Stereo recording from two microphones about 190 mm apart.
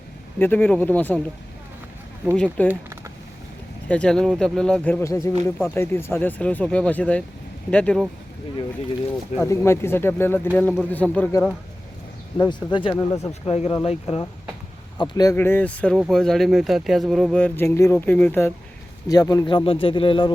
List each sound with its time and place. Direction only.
0.3 s speech: 10° left (ahead or behind)
2.3 s speech: 5° left (ahead or behind)
2.6 s a sound: 15° right (ahead or behind)
3.8 s speech: 5° left (ahead or behind)
9.4 s speech: 15° left (ahead or behind)
12.4 s speech: 25° left (ahead or behind)